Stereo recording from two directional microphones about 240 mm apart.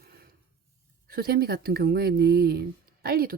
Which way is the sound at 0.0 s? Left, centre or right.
Right.